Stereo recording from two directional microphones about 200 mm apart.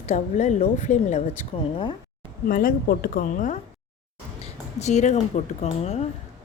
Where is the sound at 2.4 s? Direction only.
45° left (ahead or behind).